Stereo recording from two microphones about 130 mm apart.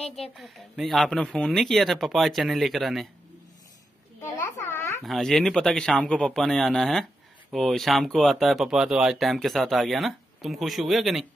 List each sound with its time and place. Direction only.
0.3 s speech: centre (ahead or behind)
4.2 s babbling: 20° left (ahead or behind)
5.0 s speech: centre (ahead or behind)